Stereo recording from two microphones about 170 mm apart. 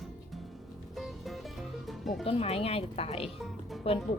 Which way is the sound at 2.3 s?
35° left (ahead or behind).